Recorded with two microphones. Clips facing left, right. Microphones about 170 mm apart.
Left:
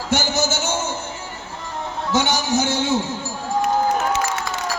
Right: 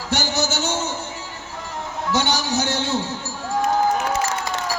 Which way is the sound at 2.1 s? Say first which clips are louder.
Left 3 dB; 15° left (ahead or behind).